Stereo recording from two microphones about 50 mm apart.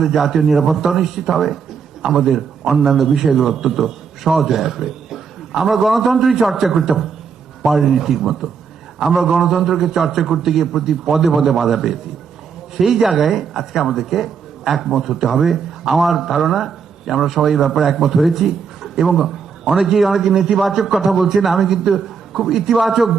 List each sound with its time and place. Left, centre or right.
0.0 s speech: centre
19.6 s a man's voice: centre
19.9 s speech: centre